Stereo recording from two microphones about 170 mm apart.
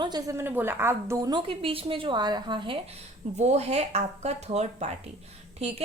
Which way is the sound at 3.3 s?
40° right (ahead or behind).